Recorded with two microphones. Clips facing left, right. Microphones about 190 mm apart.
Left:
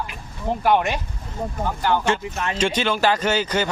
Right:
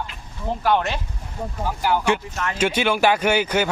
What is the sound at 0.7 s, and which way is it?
Speech, 15° left (ahead or behind).